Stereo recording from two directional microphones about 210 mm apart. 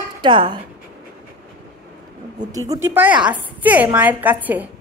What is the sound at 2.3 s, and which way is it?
A woman's voice, 20° right (ahead or behind).